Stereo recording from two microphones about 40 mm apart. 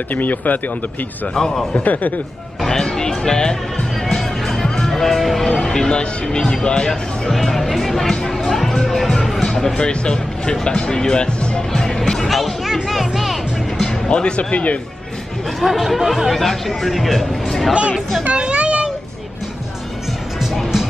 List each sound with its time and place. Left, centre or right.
0.1 s speech: left
1.3 s speech: centre
1.9 s speech: left
2.6 s speech: centre
4.1 s music: centre
9.8 s music: left; by 13.8 s centre
13.8 s speech: left
15.6 s speech: centre
18.3 s children playing: right